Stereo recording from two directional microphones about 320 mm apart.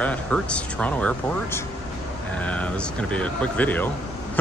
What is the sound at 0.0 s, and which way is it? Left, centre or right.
Speech, centre.